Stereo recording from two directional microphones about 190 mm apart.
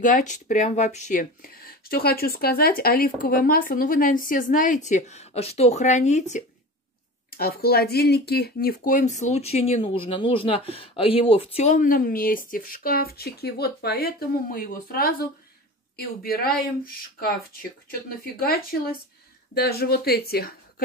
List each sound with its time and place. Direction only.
0.0 s speech: 40° left (ahead or behind)
7.2 s speech: 50° left (ahead or behind); by 11.7 s 30° left (ahead or behind)
11.7 s speech: 45° left (ahead or behind)